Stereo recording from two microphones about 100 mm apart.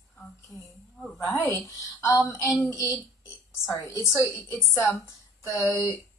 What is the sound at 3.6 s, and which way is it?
Speech, 35° left (ahead or behind).